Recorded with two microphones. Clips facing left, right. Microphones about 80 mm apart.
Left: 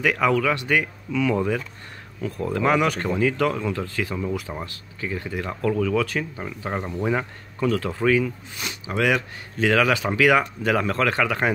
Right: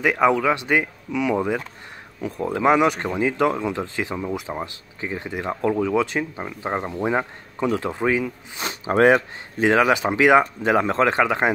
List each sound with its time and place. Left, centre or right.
0.0 s speech: right
8.6 s speech: right